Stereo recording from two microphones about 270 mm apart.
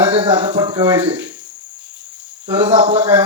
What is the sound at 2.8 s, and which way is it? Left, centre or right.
Speech, right.